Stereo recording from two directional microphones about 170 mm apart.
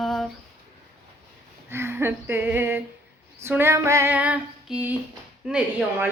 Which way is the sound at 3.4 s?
15° right (ahead or behind).